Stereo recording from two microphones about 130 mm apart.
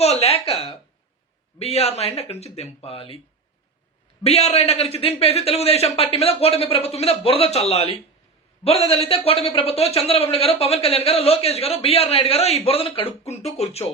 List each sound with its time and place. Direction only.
0.0 s a sound: 55° left (ahead or behind)
1.5 s a man's voice: 50° left (ahead or behind)
4.2 s a man's voice: 55° left (ahead or behind)